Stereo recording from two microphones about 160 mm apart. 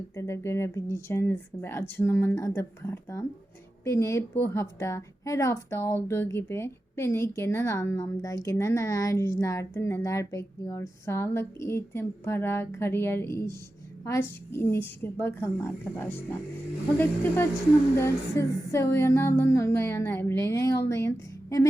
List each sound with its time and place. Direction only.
0.2 s a woman's voice: 15° left (ahead or behind)
17.9 s a woman's voice: 15° left (ahead or behind)